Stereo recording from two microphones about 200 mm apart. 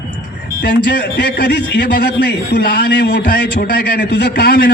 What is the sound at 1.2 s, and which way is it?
A man's voice, 50° left (ahead or behind).